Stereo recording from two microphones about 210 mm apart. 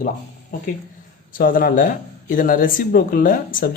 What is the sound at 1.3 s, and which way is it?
Speech, 40° left (ahead or behind).